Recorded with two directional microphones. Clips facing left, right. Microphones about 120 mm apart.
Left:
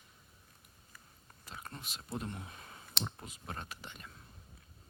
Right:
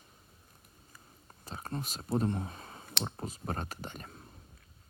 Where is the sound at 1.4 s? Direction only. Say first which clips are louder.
Right 9 dB; 35° right (ahead or behind).